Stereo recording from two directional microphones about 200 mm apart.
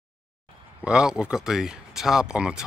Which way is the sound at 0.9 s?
5° right (ahead or behind).